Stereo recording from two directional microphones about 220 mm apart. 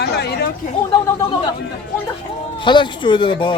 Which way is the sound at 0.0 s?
50° left (ahead or behind).